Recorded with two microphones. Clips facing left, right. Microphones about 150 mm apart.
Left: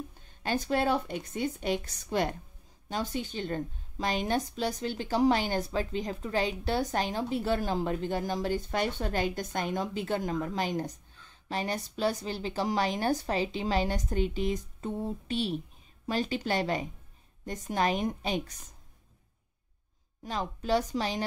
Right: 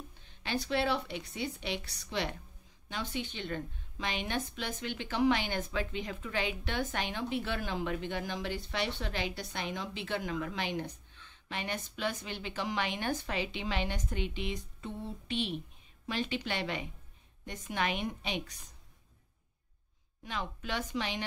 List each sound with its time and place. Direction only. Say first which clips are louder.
0.2 s a woman's voice: left 4 dB; 45° left (ahead or behind)
20.2 s a woman's voice: left 8 dB; 40° left (ahead or behind)